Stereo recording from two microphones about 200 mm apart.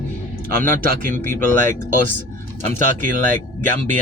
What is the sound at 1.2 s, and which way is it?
Speech, 10° left (ahead or behind).